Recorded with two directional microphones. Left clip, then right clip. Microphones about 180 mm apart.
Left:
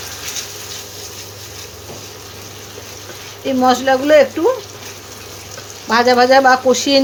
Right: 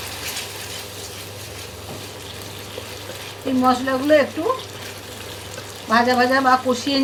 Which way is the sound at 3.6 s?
60° left (ahead or behind).